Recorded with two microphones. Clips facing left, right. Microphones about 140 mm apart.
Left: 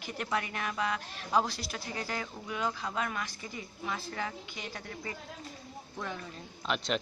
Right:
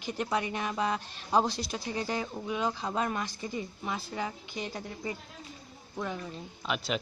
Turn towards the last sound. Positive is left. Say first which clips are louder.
# even
turn(degrees=-5)  # may be behind; listen again after turning